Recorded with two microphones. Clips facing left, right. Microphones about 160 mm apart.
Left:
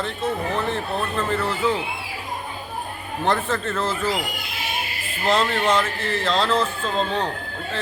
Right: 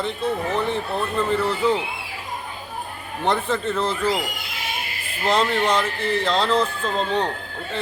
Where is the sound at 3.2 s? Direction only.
15° right (ahead or behind).